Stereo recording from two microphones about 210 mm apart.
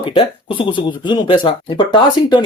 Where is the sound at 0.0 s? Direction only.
25° left (ahead or behind).